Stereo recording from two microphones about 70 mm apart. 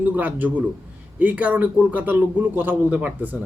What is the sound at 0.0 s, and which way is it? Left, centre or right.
A man's voice, right.